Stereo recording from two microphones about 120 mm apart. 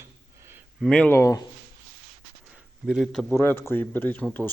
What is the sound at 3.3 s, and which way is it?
Speech, 20° left (ahead or behind).